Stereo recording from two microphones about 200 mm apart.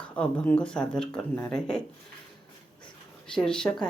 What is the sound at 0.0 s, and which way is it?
Speech, 5° left (ahead or behind).